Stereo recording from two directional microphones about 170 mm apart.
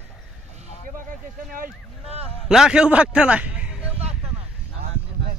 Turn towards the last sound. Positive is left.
turn(degrees=-5)  # may be behind; listen again after turning